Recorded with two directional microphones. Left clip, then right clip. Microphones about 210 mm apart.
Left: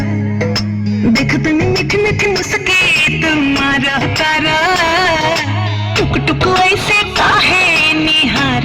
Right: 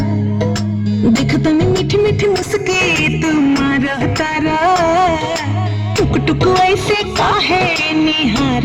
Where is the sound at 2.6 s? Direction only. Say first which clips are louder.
Left 5 dB; 55° right (ahead or behind).